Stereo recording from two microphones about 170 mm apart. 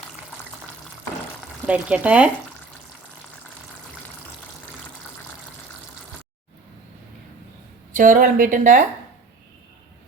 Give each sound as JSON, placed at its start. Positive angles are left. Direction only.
{"t": 1.6, "sound": "speech", "side_deg": -5}
{"t": 7.9, "sound": "speech", "side_deg": -55}